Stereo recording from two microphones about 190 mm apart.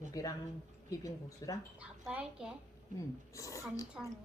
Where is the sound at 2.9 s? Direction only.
40° right (ahead or behind).